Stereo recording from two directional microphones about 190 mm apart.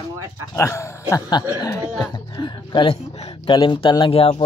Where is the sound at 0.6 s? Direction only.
15° left (ahead or behind).